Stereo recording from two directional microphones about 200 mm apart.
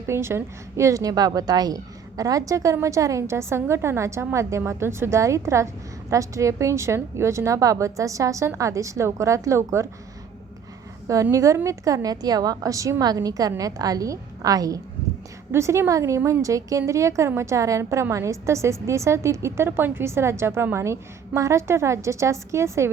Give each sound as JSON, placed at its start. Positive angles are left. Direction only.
{"t": 0.1, "sound": "a woman's voice", "side_deg": -10}
{"t": 11.1, "sound": "a woman's voice", "side_deg": -15}